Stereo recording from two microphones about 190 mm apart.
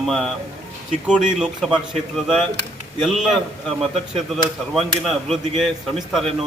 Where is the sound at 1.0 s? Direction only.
Centre (ahead or behind).